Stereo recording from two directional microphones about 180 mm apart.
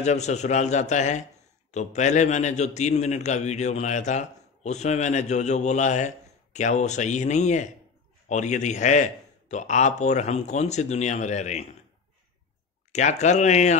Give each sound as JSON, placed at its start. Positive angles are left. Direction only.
{"t": 0.0, "sound": "a man's voice", "side_deg": 40}
{"t": 12.9, "sound": "a man's voice", "side_deg": 40}